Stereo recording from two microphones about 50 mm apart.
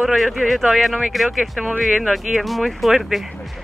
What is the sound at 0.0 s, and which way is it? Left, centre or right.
Speech, centre.